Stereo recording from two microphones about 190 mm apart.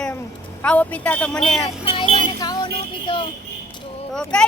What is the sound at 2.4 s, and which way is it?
Music, 20° left (ahead or behind).